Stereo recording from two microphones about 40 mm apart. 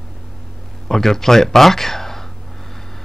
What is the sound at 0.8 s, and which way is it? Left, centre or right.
Speech, centre.